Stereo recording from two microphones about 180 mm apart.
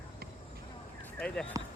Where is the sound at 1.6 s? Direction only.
20° right (ahead or behind).